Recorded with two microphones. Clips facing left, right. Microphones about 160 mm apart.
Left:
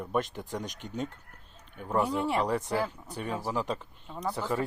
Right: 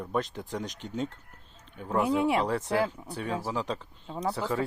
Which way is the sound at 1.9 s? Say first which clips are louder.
Right 3 dB; 15° right (ahead or behind).